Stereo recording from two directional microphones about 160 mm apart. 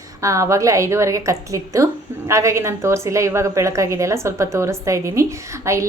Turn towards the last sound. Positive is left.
turn(degrees=-20)  # may be behind; listen again after turning